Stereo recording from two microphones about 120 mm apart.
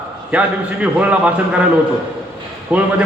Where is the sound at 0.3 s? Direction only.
10° right (ahead or behind).